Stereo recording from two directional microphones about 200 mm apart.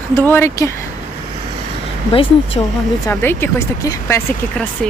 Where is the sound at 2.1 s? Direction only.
30° left (ahead or behind).